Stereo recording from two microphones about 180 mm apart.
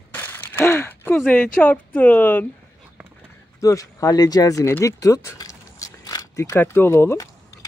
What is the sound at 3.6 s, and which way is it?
Speech, 20° left (ahead or behind).